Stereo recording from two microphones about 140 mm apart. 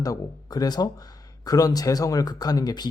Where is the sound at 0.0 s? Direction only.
25° left (ahead or behind).